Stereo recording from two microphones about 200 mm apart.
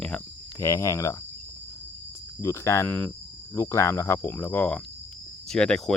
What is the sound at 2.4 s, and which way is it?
Speech, 15° left (ahead or behind).